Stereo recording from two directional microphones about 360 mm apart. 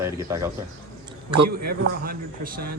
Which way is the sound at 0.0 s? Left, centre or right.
Centre.